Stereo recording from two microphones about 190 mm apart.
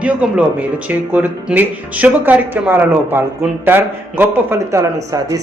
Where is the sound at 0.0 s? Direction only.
5° right (ahead or behind).